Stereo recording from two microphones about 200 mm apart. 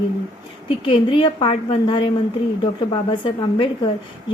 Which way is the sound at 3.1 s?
25° left (ahead or behind).